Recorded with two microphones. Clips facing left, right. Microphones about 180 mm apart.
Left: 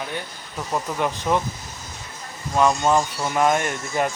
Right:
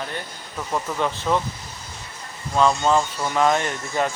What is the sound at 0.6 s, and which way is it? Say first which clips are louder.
Speech: even; 15° left (ahead or behind).